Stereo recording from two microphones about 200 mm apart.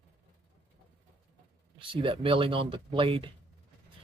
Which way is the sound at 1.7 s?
25° right (ahead or behind).